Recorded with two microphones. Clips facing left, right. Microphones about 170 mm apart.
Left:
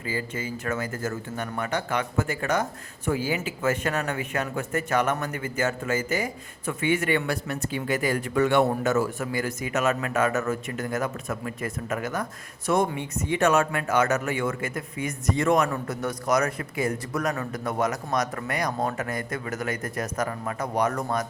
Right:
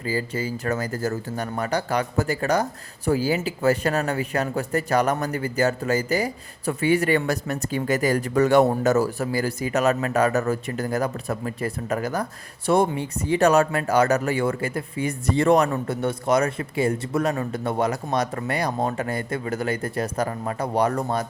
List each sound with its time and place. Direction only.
0.0 s speech: 35° right (ahead or behind)